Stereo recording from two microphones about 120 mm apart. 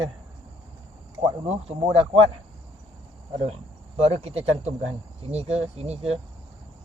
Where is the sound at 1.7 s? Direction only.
50° right (ahead or behind).